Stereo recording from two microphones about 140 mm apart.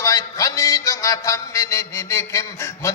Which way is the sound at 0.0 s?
25° left (ahead or behind).